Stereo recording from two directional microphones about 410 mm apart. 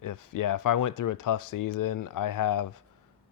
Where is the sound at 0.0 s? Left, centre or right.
Left.